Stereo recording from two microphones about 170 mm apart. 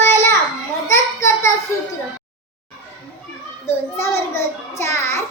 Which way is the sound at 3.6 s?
15° left (ahead or behind).